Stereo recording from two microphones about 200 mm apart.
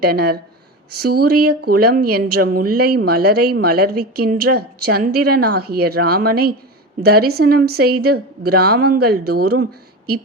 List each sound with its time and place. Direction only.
0.0 s a woman's voice: 50° right (ahead or behind)